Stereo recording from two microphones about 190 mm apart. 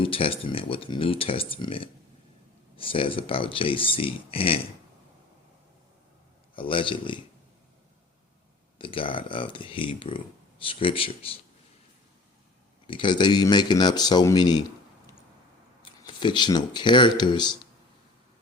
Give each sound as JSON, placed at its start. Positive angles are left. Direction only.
{"t": 0.0, "sound": "speech", "side_deg": 30}
{"t": 6.6, "sound": "speech", "side_deg": 25}
{"t": 8.8, "sound": "speech", "side_deg": 25}
{"t": 12.9, "sound": "speech", "side_deg": 25}
{"t": 15.8, "sound": "speech", "side_deg": 25}